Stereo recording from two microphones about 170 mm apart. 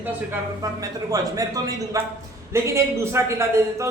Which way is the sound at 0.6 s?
20° right (ahead or behind).